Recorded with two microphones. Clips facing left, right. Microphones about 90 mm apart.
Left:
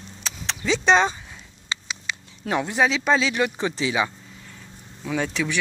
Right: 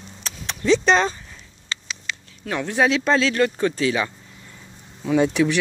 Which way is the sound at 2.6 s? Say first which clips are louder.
Right 3 dB; centre (ahead or behind).